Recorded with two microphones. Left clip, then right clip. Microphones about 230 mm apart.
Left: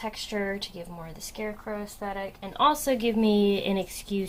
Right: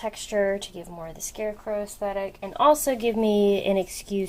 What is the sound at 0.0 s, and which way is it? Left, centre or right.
A woman's voice, right.